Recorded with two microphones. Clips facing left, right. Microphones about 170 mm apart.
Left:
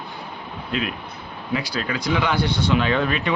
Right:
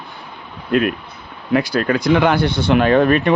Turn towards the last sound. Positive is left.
turn(degrees=-50)  # may be behind; listen again after turning